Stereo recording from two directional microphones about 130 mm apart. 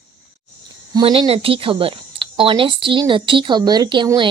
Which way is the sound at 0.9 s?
35° right (ahead or behind).